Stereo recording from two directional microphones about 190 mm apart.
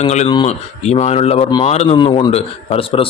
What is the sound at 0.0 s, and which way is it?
Speech, 35° left (ahead or behind).